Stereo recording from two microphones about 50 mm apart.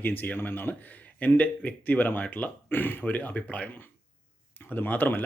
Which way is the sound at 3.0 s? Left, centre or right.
Left.